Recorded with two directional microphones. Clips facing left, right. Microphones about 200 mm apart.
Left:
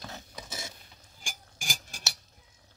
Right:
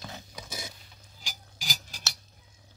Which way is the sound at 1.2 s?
50° left (ahead or behind).